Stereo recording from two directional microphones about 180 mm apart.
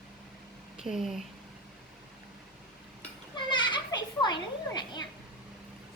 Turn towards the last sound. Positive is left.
turn(degrees=25)  # may be behind; listen again after turning